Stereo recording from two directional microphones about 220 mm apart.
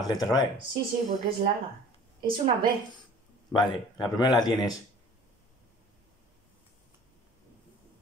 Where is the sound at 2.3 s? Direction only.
40° right (ahead or behind).